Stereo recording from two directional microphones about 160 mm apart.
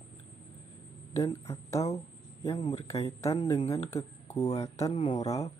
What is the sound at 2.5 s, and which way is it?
Speech, 35° left (ahead or behind).